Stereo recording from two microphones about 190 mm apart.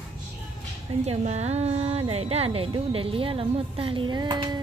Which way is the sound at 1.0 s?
35° right (ahead or behind).